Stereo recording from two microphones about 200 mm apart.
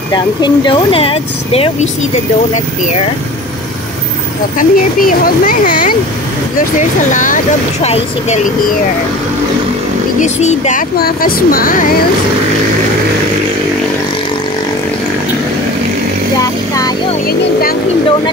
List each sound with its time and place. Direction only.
0.1 s speech: 25° left (ahead or behind)
4.6 s speech: 45° left (ahead or behind)
10.2 s speech: 35° left (ahead or behind)
17.3 s speech: 50° left (ahead or behind)